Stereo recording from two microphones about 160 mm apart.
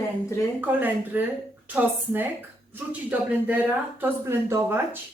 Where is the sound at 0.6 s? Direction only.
10° right (ahead or behind).